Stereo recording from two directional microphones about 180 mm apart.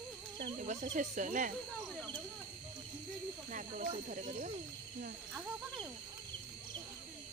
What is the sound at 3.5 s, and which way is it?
Speech, 45° right (ahead or behind).